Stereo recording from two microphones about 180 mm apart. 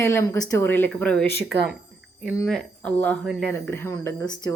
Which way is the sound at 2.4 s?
5° left (ahead or behind).